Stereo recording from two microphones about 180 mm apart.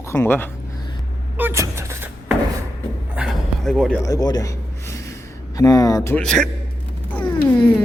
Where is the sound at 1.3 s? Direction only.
15° right (ahead or behind).